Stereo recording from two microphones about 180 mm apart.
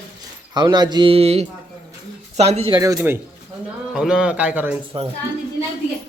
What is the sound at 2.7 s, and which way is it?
Speech, 15° right (ahead or behind).